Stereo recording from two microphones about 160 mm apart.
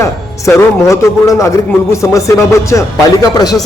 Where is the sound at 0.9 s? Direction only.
20° left (ahead or behind).